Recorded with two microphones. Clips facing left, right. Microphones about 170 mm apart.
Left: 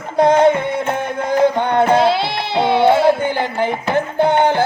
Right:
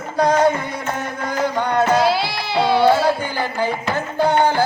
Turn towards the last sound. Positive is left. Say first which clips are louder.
# left 2 dB
turn(degrees=20)  # may be behind; listen again after turning